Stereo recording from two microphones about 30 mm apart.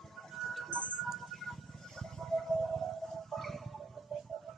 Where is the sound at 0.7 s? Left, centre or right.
Left.